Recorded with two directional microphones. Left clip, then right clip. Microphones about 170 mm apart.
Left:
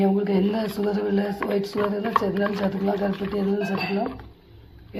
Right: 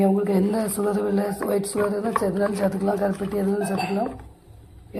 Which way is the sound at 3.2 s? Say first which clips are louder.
Even; centre (ahead or behind).